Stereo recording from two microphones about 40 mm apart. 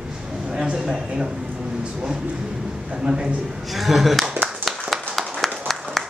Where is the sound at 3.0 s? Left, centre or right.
Right.